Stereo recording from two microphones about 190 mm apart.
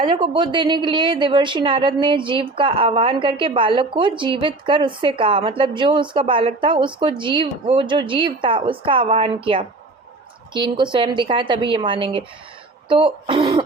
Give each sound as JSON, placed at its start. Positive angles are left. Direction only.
{"t": 0.1, "sound": "a woman's voice", "side_deg": -25}